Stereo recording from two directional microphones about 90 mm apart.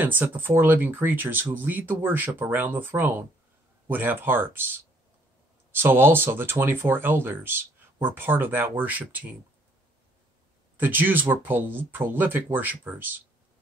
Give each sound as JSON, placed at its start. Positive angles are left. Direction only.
{"t": 0.0, "sound": "speech", "side_deg": -20}
{"t": 10.8, "sound": "speech", "side_deg": -20}